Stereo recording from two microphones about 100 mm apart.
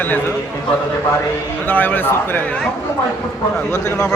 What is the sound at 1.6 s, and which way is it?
Speech, 20° left (ahead or behind).